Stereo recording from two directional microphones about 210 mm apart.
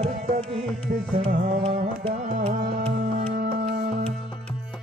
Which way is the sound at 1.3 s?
30° right (ahead or behind).